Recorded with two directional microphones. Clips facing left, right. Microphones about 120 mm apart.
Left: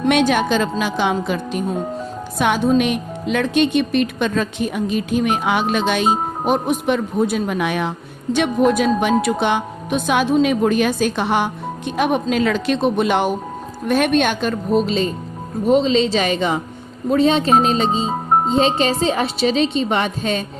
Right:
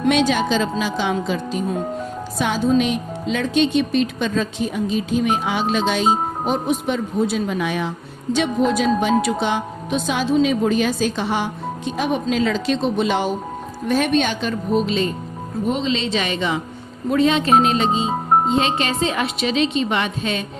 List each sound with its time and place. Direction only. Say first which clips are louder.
0.1 s speech: left 2 dB; 55° left (ahead or behind)
14.8 s a woman's voice: left 1 dB; 35° left (ahead or behind)